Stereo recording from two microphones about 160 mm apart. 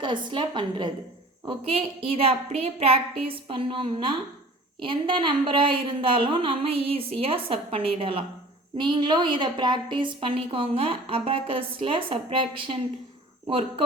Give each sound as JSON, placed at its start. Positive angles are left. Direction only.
{"t": 0.0, "sound": "a woman's voice", "side_deg": -30}